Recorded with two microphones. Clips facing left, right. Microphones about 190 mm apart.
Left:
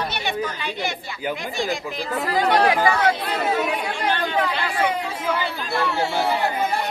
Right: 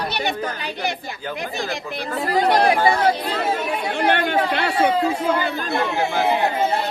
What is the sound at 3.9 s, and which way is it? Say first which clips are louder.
Chatter: right 4 dB; 70° right (ahead or behind).